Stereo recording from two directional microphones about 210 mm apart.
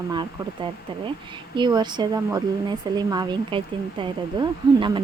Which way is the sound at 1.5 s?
20° right (ahead or behind).